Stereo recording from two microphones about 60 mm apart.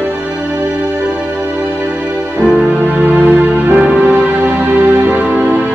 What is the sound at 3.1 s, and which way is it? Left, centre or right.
Music, right.